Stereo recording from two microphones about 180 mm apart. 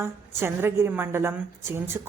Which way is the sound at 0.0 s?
15° right (ahead or behind).